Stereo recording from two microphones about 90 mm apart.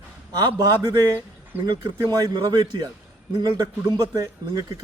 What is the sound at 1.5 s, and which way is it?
Speech, 25° right (ahead or behind).